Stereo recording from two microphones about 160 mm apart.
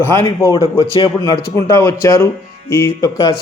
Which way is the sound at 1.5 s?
20° left (ahead or behind).